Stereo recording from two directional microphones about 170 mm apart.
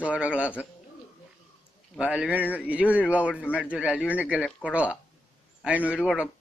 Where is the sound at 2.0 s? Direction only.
5° right (ahead or behind).